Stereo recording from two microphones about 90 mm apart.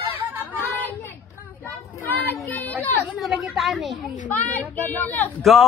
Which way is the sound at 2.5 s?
20° left (ahead or behind).